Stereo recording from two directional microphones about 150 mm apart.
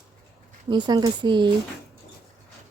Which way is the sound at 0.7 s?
30° right (ahead or behind).